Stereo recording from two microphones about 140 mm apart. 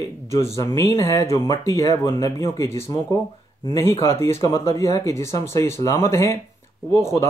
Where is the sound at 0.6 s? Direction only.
20° left (ahead or behind).